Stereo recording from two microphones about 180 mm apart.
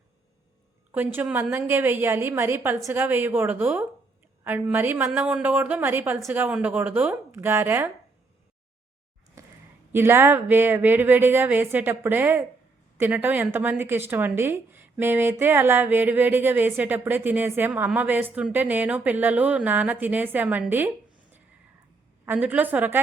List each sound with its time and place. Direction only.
0.9 s a woman's voice: 10° right (ahead or behind)
9.4 s a sound: 15° right (ahead or behind)
9.9 s a woman's voice: 15° right (ahead or behind)
22.3 s a woman's voice: 10° right (ahead or behind)